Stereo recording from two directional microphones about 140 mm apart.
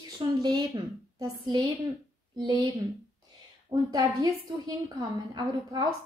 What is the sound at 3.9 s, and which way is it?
A woman's voice, 25° right (ahead or behind).